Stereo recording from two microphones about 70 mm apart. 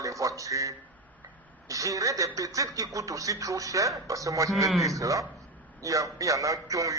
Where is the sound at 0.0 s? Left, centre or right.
Right.